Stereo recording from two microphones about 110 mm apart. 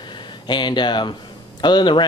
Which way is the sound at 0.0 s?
45° left (ahead or behind).